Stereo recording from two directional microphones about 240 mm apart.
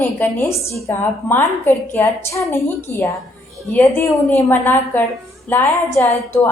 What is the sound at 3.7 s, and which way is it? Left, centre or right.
A woman's voice, centre.